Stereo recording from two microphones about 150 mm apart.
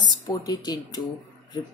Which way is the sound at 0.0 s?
30° left (ahead or behind).